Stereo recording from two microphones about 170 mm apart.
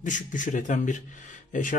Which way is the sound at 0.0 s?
50° left (ahead or behind).